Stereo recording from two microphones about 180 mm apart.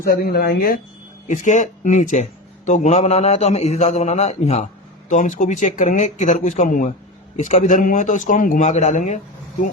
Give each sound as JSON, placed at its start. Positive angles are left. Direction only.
{"t": 0.0, "sound": "speech", "side_deg": 55}
{"t": 1.3, "sound": "a man's voice", "side_deg": 45}